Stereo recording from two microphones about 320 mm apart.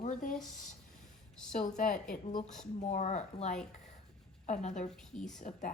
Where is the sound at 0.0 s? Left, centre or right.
Left.